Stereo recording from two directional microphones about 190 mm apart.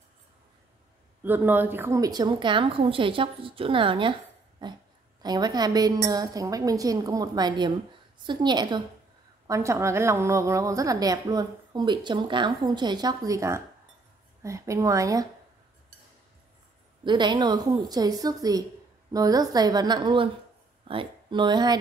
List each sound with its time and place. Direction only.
1.2 s a woman's voice: 10° right (ahead or behind)
17.0 s a woman's voice: 25° right (ahead or behind)